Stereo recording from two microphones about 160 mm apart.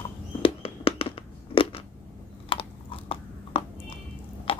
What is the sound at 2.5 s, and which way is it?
Crunch, 35° left (ahead or behind).